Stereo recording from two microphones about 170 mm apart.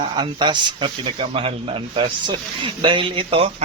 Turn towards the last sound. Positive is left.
turn(degrees=-35)  # may be behind; listen again after turning